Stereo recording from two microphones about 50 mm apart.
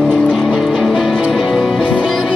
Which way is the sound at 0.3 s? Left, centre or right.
Centre.